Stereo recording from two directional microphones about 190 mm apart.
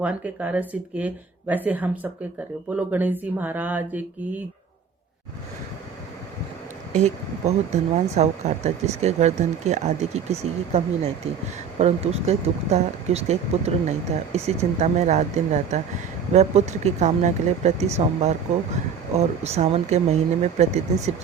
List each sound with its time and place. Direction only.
0.0 s speech: 5° right (ahead or behind)
6.9 s speech: 35° right (ahead or behind)